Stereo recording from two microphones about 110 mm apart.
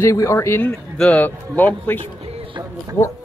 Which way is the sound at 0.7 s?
10° left (ahead or behind).